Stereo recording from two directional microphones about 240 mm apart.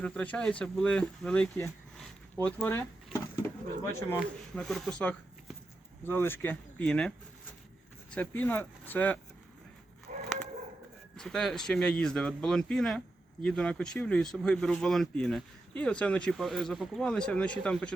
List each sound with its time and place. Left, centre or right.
0.0 s speech: centre
4.5 s speech: centre
10.1 s a sound: right
11.2 s speech: centre